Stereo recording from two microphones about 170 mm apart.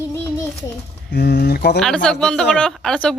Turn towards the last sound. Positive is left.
turn(degrees=5)  # may be behind; listen again after turning